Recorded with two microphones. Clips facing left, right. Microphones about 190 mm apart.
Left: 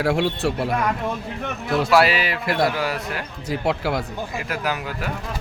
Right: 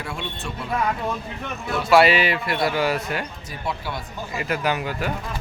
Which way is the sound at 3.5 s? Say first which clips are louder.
Left 9 dB; 90° left.